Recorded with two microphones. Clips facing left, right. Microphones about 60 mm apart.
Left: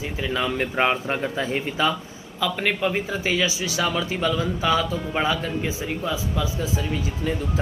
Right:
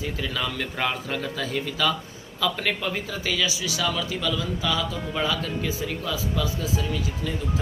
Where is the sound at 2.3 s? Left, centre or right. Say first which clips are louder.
Left 2 dB; centre.